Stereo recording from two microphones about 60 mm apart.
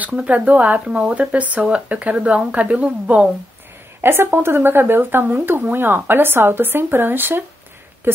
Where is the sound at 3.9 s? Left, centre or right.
Right.